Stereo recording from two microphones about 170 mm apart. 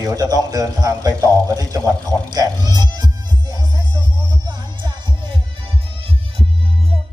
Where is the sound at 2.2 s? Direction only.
25° right (ahead or behind).